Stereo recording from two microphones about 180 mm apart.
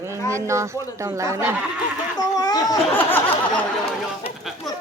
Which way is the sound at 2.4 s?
20° left (ahead or behind).